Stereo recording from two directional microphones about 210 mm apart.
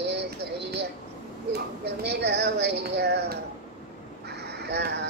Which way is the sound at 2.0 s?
50° right (ahead or behind).